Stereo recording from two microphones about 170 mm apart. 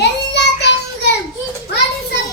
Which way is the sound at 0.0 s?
85° left.